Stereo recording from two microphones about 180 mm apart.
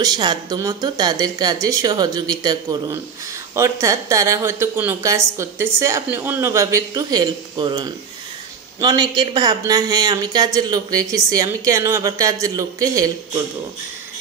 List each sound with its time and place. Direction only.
0.0 s a man's voice: 25° right (ahead or behind)